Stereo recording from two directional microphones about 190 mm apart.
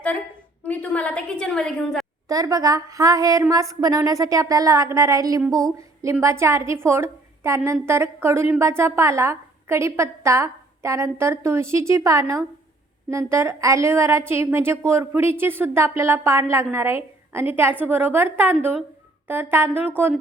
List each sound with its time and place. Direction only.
0.6 s a woman's voice: 5° left (ahead or behind)
2.2 s a woman's voice: 20° right (ahead or behind)